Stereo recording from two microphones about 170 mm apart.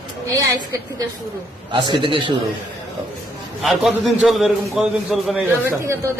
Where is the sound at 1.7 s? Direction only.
30° right (ahead or behind).